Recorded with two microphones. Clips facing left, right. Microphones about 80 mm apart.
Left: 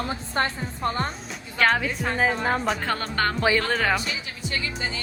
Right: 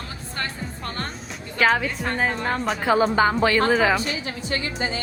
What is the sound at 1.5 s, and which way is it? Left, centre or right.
A woman's voice, centre.